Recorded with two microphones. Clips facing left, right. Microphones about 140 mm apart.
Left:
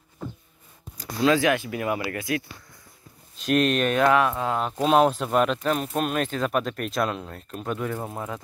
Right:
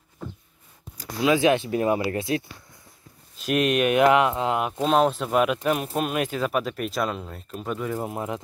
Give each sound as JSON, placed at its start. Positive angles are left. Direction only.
{"t": 0.9, "sound": "speech", "side_deg": -15}
{"t": 3.3, "sound": "speech", "side_deg": -10}
{"t": 4.7, "sound": "speech", "side_deg": 0}
{"t": 8.0, "sound": "speech", "side_deg": -20}